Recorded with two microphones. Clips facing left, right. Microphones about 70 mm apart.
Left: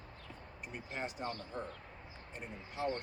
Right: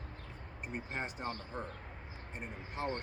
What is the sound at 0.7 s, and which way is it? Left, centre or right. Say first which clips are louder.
Speech: right 1 dB; right.